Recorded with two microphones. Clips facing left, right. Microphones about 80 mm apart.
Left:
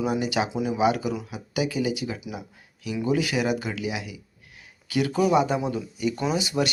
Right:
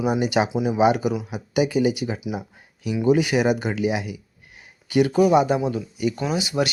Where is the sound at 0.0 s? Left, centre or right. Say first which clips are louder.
Right 4 dB; centre.